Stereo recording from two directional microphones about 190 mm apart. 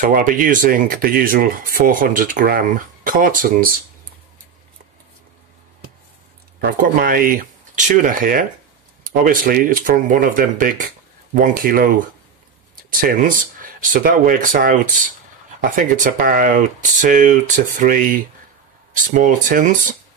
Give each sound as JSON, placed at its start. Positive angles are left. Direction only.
{"t": 0.0, "sound": "speech", "side_deg": -45}
{"t": 6.6, "sound": "speech", "side_deg": -50}